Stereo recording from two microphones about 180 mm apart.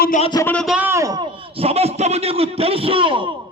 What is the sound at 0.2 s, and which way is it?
Speech, 25° left (ahead or behind).